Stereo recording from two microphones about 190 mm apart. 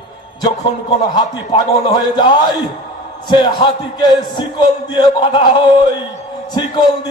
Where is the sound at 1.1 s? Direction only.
20° left (ahead or behind).